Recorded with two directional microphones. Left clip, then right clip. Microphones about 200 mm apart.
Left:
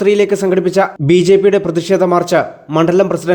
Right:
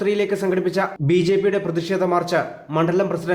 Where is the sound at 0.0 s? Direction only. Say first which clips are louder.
Left 9 dB; 35° left (ahead or behind).